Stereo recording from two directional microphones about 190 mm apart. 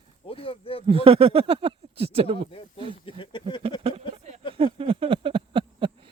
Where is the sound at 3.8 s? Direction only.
40° right (ahead or behind).